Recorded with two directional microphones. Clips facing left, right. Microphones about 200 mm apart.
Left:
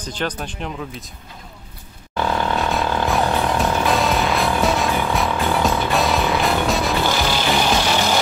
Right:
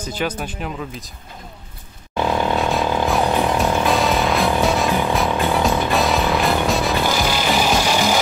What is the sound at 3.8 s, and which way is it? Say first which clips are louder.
Music: right 1 dB; centre (ahead or behind).